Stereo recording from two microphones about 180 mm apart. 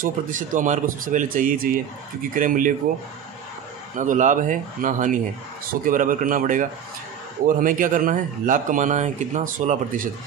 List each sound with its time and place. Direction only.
0.0 s speech: 45° right (ahead or behind)
3.9 s speech: 45° right (ahead or behind)